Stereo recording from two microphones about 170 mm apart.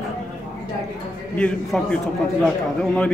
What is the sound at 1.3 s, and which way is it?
Speech, 5° left (ahead or behind).